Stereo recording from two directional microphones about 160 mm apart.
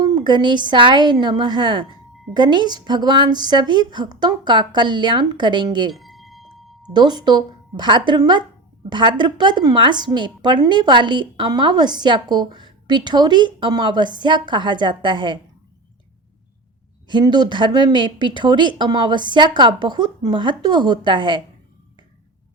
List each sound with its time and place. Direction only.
0.0 s speech: 30° right (ahead or behind)
5.9 s a sound: centre (ahead or behind)
6.9 s speech: 25° right (ahead or behind)
17.1 s speech: 25° right (ahead or behind)